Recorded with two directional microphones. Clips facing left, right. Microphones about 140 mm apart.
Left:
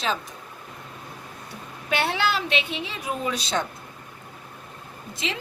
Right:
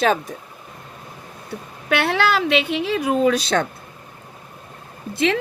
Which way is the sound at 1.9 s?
65° right (ahead or behind).